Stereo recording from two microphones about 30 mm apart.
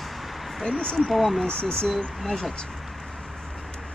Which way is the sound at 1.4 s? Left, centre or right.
Left.